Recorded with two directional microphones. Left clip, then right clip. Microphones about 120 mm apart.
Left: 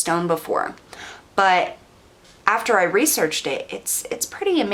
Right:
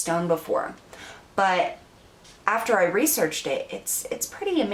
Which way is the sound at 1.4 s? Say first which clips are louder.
Left 5 dB; 30° left (ahead or behind).